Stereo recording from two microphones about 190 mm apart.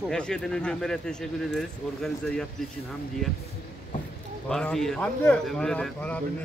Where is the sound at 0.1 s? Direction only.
5° left (ahead or behind).